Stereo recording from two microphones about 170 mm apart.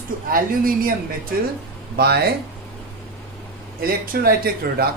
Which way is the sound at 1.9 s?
70° right (ahead or behind).